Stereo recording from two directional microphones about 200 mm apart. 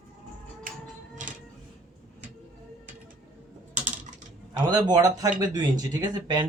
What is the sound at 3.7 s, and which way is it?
Typing, 35° right (ahead or behind).